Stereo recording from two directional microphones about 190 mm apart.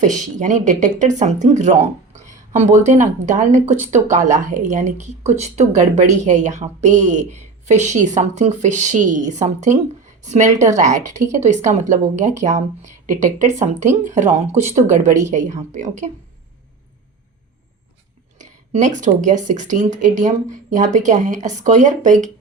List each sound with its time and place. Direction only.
0.0 s speech: 40° right (ahead or behind)
18.3 s speech: 40° right (ahead or behind)